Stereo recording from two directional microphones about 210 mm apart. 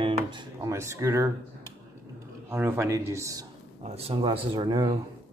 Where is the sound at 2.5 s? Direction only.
10° right (ahead or behind).